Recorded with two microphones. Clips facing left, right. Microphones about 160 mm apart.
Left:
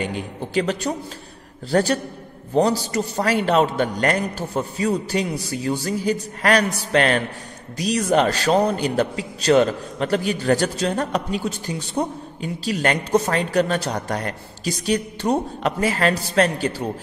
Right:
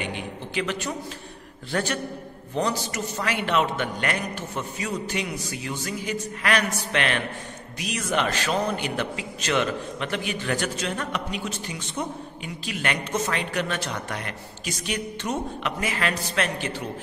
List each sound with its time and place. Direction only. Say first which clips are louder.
0.0 s a man's voice: left 5 dB; 40° left (ahead or behind)